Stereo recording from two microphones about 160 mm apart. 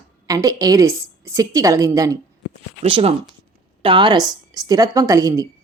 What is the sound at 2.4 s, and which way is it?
A woman's voice, 35° right (ahead or behind).